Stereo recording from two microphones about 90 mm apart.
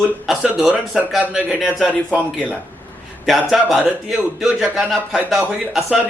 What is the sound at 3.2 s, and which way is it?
A man's voice, centre (ahead or behind).